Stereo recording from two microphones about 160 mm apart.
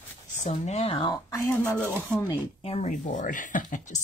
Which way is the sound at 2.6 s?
40° left (ahead or behind).